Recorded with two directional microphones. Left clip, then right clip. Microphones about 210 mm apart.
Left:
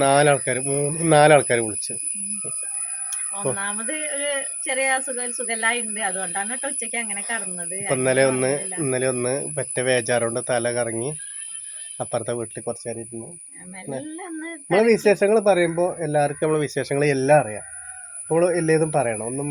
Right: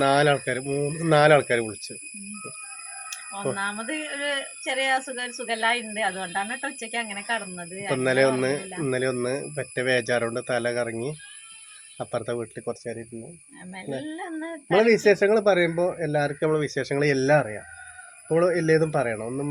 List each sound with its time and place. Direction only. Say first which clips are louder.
0.0 s speech: left 3 dB; 35° left (ahead or behind)
3.5 s speech: even; centre (ahead or behind)
7.9 s speech: left 2 dB; 30° left (ahead or behind)
14.0 s speech: even; 5° right (ahead or behind)
14.8 s speech: left 1 dB; 30° left (ahead or behind)